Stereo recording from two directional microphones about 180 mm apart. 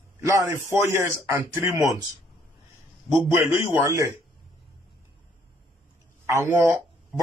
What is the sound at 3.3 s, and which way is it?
Speech, 15° right (ahead or behind).